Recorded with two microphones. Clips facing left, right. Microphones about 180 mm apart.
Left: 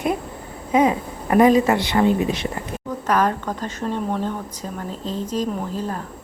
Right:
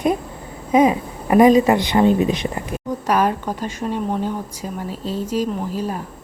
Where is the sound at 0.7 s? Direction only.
15° right (ahead or behind).